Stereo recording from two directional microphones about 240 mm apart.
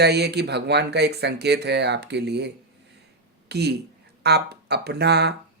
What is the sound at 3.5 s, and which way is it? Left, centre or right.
Speech, right.